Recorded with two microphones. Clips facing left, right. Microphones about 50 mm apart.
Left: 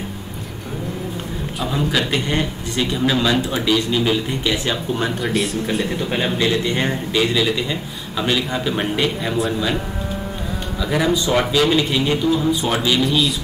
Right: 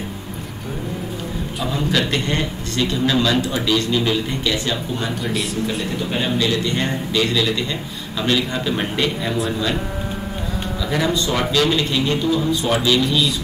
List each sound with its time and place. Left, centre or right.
1.6 s a man's voice: centre
5.2 s speech: centre
6.1 s a man's voice: left; by 9.8 s centre
10.8 s a man's voice: centre